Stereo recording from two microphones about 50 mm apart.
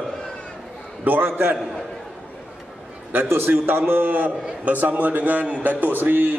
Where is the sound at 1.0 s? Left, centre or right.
Right.